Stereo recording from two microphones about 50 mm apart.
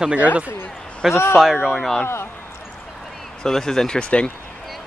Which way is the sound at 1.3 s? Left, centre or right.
Centre.